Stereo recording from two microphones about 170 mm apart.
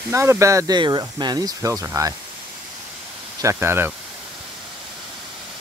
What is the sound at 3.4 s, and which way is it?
Speech, 15° right (ahead or behind).